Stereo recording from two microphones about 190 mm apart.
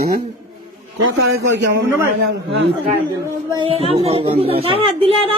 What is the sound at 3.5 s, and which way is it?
A woman's voice, 30° right (ahead or behind).